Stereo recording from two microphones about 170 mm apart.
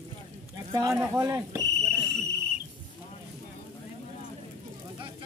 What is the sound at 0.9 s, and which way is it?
Speech, 20° right (ahead or behind).